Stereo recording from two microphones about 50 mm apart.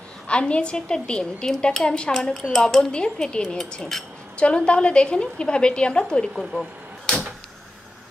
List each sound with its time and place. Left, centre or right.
0.3 s speech: left
2.9 s speech: centre